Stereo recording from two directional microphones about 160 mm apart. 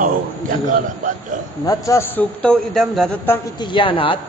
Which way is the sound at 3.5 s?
30° left (ahead or behind).